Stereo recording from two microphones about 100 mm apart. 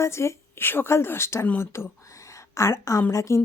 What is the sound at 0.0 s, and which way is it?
A woman's voice, 30° left (ahead or behind).